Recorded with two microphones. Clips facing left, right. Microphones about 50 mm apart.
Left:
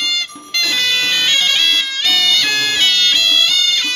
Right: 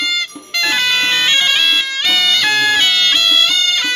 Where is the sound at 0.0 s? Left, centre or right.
Centre.